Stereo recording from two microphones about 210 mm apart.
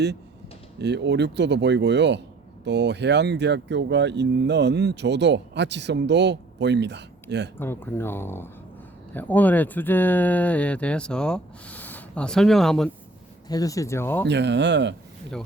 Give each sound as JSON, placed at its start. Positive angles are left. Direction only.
{"t": 0.8, "sound": "speech", "side_deg": -55}
{"t": 7.6, "sound": "speech", "side_deg": 10}
{"t": 13.5, "sound": "speech", "side_deg": 15}
{"t": 14.3, "sound": "speech", "side_deg": -55}